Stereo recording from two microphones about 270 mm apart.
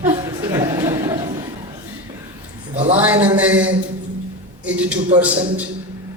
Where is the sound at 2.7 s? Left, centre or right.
Right.